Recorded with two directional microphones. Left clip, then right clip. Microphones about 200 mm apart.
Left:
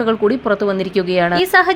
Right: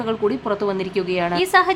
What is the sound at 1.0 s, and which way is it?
Speech, 15° left (ahead or behind).